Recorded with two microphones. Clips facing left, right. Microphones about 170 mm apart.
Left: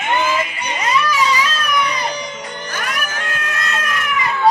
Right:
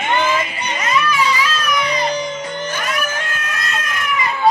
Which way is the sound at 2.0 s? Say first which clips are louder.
Right 4 dB; 25° right (ahead or behind).